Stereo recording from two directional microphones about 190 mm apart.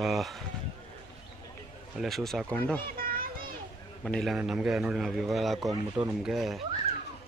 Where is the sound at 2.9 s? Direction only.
50° right (ahead or behind).